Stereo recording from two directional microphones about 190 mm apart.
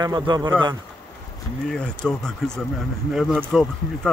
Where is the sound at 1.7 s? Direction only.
5° left (ahead or behind).